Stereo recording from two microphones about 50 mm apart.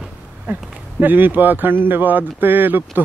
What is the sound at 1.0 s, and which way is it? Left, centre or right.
Speech, right.